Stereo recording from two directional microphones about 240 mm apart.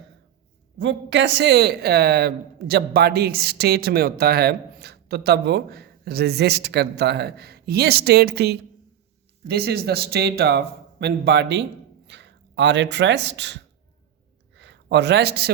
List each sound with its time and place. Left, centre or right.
0.8 s speech: right